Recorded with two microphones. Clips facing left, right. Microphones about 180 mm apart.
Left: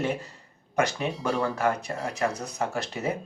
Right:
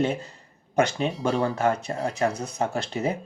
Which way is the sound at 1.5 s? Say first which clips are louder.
Right 2 dB; 25° right (ahead or behind).